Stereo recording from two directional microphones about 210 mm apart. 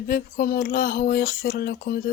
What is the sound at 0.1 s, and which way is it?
Speech, 45° left (ahead or behind).